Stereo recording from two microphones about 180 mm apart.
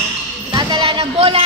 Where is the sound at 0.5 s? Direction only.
25° right (ahead or behind).